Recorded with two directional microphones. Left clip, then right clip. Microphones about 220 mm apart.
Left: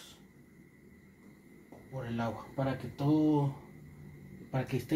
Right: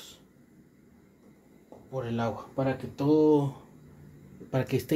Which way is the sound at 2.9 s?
45° right (ahead or behind).